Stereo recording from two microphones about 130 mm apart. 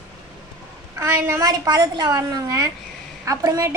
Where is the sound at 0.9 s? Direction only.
25° right (ahead or behind).